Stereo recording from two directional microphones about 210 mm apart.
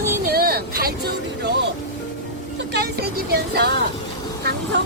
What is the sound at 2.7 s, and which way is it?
Speech, 50° right (ahead or behind).